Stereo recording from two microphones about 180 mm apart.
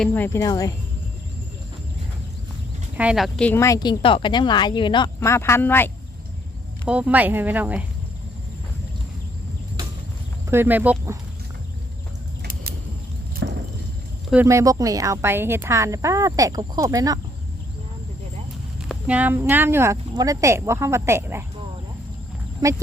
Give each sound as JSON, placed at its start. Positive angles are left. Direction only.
{"t": 0.0, "sound": "a woman's voice", "side_deg": 10}
{"t": 3.0, "sound": "a woman's voice", "side_deg": -5}
{"t": 6.8, "sound": "speech", "side_deg": -5}
{"t": 10.5, "sound": "speech", "side_deg": -10}
{"t": 12.4, "sound": "vehicle", "side_deg": -60}
{"t": 13.4, "sound": "a sound", "side_deg": -90}
{"t": 14.4, "sound": "speech", "side_deg": -20}
{"t": 18.9, "sound": "speech", "side_deg": -5}
{"t": 22.6, "sound": "speech", "side_deg": -20}